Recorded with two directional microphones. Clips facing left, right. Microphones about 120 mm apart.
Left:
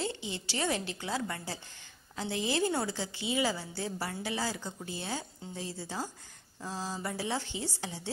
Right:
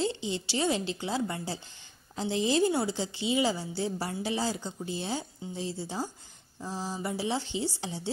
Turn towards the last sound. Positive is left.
turn(degrees=-20)  # may be behind; listen again after turning